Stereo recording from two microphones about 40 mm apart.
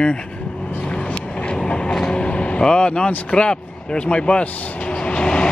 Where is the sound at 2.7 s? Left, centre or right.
Left.